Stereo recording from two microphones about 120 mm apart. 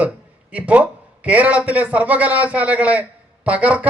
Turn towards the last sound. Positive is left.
turn(degrees=-10)  # may be behind; listen again after turning